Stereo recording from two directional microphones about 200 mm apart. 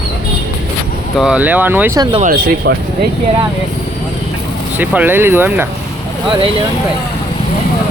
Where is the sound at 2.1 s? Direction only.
30° right (ahead or behind).